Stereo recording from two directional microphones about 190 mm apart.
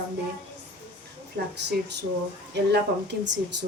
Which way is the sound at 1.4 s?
55° right (ahead or behind).